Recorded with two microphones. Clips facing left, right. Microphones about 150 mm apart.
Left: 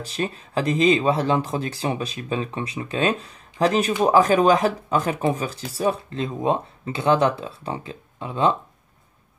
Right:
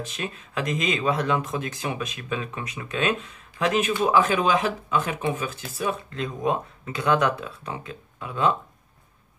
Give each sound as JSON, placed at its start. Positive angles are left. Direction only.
{"t": 0.0, "sound": "speech", "side_deg": 35}